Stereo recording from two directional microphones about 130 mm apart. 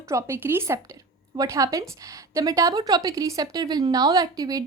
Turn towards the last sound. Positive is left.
turn(degrees=-30)  # may be behind; listen again after turning